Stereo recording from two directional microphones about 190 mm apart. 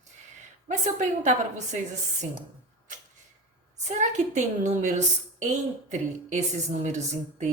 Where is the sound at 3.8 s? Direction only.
40° right (ahead or behind).